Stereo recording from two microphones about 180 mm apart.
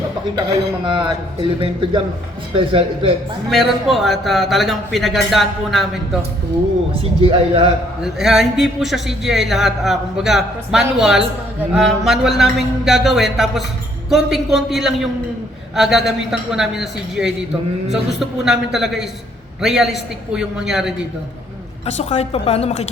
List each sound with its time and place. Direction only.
0.9 s speech: 25° right (ahead or behind)
3.5 s a man's voice: centre (ahead or behind)
7.2 s a man's voice: 30° right (ahead or behind)
8.0 s a man's voice: centre (ahead or behind)
18.4 s a man's voice: centre (ahead or behind)
21.8 s a woman's voice: 40° left (ahead or behind)